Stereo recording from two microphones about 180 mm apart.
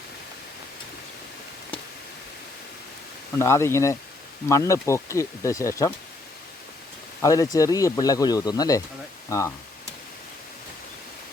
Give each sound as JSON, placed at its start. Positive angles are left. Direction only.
{"t": 3.3, "sound": "speech", "side_deg": 15}
{"t": 7.2, "sound": "speech", "side_deg": 20}